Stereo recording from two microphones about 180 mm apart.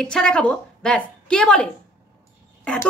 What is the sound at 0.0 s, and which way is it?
A woman's voice, 5° left (ahead or behind).